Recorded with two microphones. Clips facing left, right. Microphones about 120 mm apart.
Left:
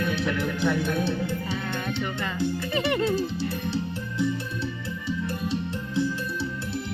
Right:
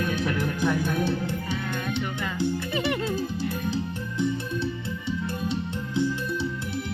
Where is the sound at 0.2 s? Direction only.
15° right (ahead or behind).